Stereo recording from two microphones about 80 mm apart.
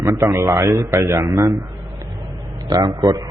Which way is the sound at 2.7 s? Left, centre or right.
Right.